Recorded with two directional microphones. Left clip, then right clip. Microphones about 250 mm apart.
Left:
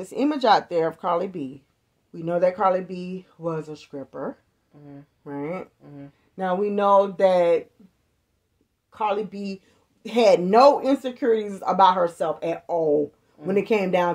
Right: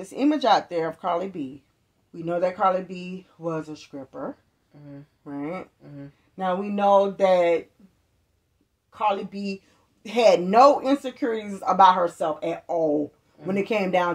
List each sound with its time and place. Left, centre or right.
0.0 s speech: left
8.9 s speech: left